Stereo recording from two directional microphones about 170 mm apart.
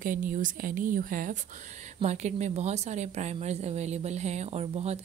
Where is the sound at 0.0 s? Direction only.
50° right (ahead or behind).